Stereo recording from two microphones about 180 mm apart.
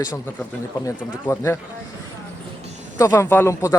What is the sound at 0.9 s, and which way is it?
Speech, 15° left (ahead or behind).